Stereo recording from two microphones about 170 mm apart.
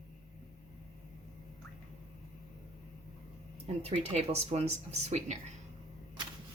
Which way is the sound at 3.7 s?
35° right (ahead or behind).